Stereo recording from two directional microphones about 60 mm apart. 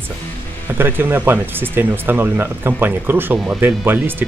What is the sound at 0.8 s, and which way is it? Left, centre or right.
Speech, right.